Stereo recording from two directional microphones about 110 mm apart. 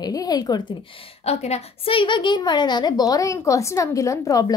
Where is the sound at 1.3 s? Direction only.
75° left (ahead or behind).